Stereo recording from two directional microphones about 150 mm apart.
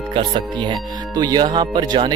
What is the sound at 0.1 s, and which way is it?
Speech, 35° right (ahead or behind).